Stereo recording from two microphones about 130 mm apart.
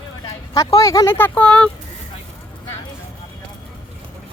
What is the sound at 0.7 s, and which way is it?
Speech, 25° left (ahead or behind).